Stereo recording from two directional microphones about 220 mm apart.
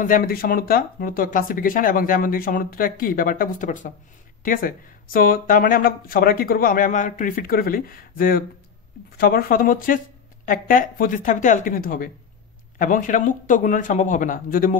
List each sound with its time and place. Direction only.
0.0 s speech: 40° left (ahead or behind)